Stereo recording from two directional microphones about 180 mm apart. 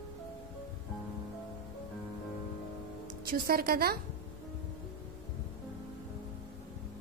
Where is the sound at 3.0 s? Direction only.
55° right (ahead or behind).